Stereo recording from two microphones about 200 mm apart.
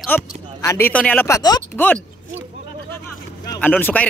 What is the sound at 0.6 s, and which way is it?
Speech, 15° left (ahead or behind).